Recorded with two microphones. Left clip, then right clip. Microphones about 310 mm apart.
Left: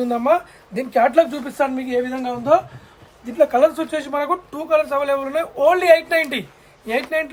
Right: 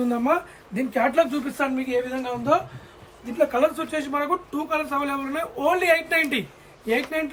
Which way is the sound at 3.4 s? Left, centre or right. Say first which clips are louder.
Left 6 dB; left.